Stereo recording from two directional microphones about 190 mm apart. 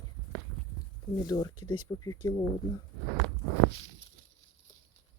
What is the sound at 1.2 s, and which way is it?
Speech, 25° left (ahead or behind).